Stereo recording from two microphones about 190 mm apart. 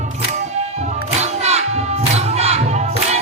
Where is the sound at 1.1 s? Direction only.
35° right (ahead or behind).